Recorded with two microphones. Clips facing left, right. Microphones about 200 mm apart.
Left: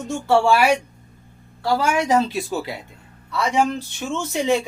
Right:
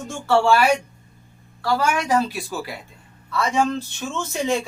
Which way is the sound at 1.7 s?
20° left (ahead or behind).